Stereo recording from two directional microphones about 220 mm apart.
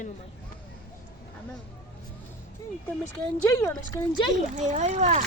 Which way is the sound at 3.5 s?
10° left (ahead or behind).